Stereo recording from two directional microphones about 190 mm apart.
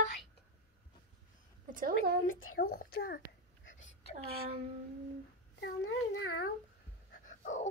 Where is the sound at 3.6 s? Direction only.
80° left.